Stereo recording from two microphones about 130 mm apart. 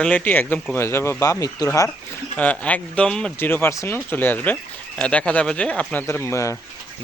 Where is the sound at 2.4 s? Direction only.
10° left (ahead or behind).